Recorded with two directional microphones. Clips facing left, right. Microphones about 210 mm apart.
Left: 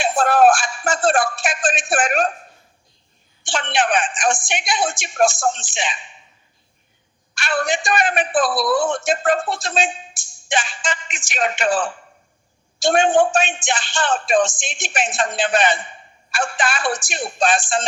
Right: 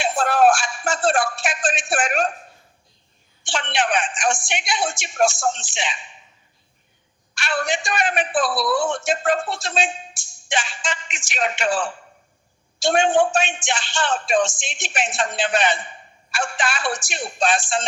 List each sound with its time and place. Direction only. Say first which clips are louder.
0.0 s a man's voice: left 3 dB; 50° left (ahead or behind)
3.4 s a man's voice: left 3 dB; 50° left (ahead or behind)
7.3 s a sound: left 3 dB; 50° left (ahead or behind)
7.7 s a man's voice: left 3 dB; 50° left (ahead or behind)